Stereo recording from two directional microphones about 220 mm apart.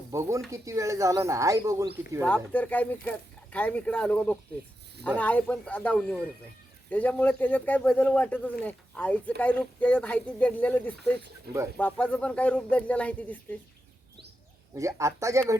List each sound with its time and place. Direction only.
0.1 s speech: 15° right (ahead or behind)
2.2 s speech: 5° left (ahead or behind)
11.5 s speech: 45° right (ahead or behind)
11.8 s speech: 5° left (ahead or behind)
14.8 s speech: 15° right (ahead or behind)